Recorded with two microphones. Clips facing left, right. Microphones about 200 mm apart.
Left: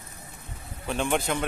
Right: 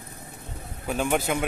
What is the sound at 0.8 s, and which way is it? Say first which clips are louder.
Speech: right 2 dB; 5° right (ahead or behind).